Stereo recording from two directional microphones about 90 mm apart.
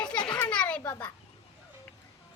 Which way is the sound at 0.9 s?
15° left (ahead or behind).